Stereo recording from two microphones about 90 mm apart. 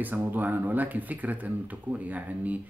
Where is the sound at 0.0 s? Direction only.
20° right (ahead or behind).